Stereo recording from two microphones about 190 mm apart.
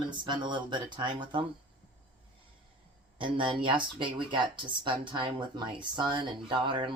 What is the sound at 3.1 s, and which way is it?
Speech, 25° right (ahead or behind).